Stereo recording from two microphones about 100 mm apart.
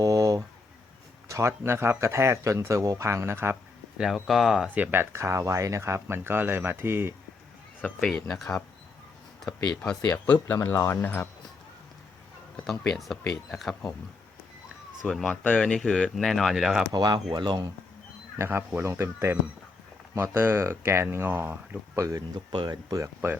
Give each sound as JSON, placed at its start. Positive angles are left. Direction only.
{"t": 0.0, "sound": "a sound", "side_deg": -35}
{"t": 1.3, "sound": "speech", "side_deg": -25}
{"t": 3.9, "sound": "speech", "side_deg": -5}
{"t": 4.7, "sound": "speech", "side_deg": -20}
{"t": 7.8, "sound": "speech", "side_deg": 10}
{"t": 10.4, "sound": "speech", "side_deg": 25}
{"t": 12.6, "sound": "speech", "side_deg": 5}
{"t": 15.0, "sound": "speech", "side_deg": 10}
{"t": 16.9, "sound": "speech", "side_deg": -45}
{"t": 18.3, "sound": "speech", "side_deg": -20}
{"t": 22.5, "sound": "speech", "side_deg": -45}